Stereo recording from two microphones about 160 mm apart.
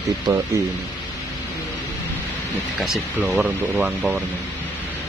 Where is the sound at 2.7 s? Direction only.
Centre (ahead or behind).